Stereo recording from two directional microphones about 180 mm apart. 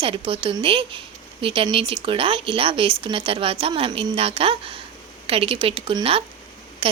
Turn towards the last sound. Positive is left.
turn(degrees=-30)  # may be behind; listen again after turning